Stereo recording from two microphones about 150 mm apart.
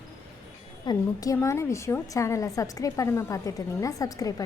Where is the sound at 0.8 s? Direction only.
25° left (ahead or behind).